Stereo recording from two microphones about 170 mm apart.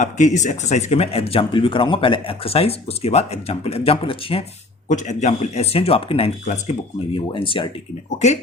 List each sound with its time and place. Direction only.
0.0 s speech: 45° left (ahead or behind)
4.9 s speech: 45° left (ahead or behind)
7.3 s speech: 30° left (ahead or behind)